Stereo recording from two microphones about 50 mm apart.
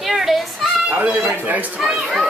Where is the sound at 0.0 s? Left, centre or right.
Centre.